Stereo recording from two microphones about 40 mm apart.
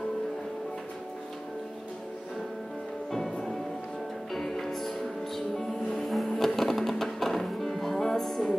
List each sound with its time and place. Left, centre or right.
3.1 s music: centre
6.0 s vehicle: centre
6.3 s music: centre